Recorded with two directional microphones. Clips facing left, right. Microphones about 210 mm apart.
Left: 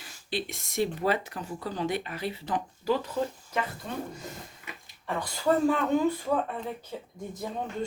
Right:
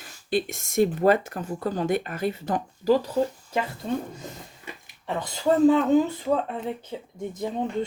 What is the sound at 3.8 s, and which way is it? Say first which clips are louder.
Speech: right 6 dB; 30° right (ahead or behind).